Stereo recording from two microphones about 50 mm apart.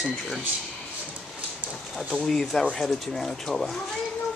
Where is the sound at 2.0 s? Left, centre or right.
Centre.